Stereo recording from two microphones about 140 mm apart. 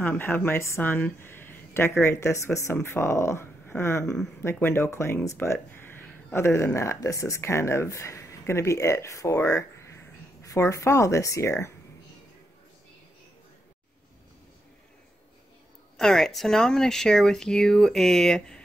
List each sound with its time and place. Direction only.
0.0 s speech: 15° left (ahead or behind)
16.0 s speech: centre (ahead or behind)